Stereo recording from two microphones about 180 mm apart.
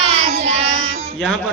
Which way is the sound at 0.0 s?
35° right (ahead or behind).